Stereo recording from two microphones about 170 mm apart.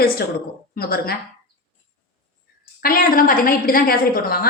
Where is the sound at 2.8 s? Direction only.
60° left (ahead or behind).